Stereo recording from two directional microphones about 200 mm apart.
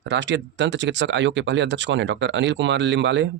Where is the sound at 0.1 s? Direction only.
60° right (ahead or behind).